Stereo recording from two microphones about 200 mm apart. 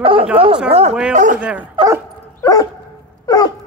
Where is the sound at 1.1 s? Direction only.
40° right (ahead or behind).